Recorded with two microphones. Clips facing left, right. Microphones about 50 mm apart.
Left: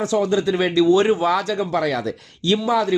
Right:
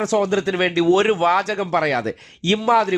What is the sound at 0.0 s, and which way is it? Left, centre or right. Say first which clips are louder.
Speech: even; right.